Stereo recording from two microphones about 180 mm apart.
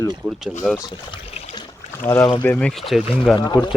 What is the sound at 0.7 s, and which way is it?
Trickle, 25° left (ahead or behind).